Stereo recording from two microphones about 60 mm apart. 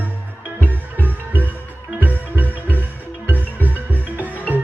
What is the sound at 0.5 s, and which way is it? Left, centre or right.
Music, left.